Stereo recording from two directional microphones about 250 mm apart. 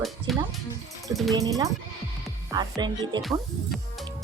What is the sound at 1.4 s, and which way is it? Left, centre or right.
Speech, centre.